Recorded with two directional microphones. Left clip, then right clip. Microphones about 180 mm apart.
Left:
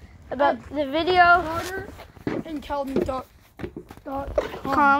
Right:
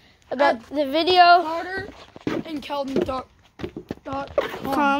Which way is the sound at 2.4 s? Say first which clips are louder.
Right 1 dB; 15° left (ahead or behind).